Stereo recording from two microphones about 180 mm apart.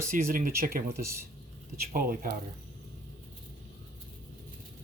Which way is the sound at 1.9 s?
55° right (ahead or behind).